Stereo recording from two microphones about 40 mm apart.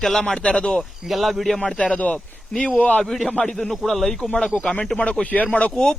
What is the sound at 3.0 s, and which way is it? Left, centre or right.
A man's voice, centre.